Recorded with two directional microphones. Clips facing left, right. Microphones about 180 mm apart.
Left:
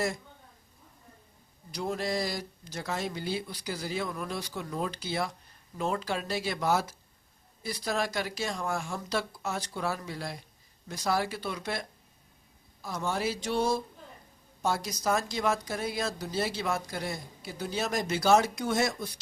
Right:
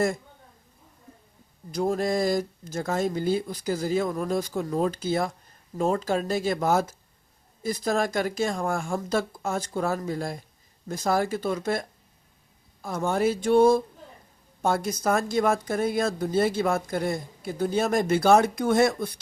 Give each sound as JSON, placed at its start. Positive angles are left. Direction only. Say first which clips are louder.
{"t": 1.7, "sound": "speech", "louder": "right 7 dB", "side_deg": -45}